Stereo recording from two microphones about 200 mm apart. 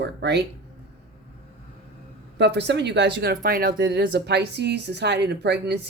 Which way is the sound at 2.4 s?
60° right (ahead or behind).